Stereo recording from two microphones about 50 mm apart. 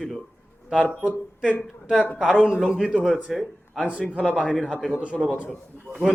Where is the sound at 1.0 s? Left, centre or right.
Right.